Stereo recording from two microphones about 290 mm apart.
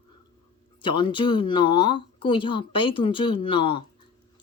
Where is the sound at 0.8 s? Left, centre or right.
Centre.